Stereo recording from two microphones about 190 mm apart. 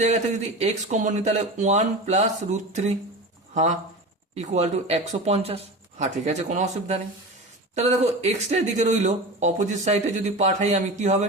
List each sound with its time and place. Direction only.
0.0 s speech: 35° right (ahead or behind)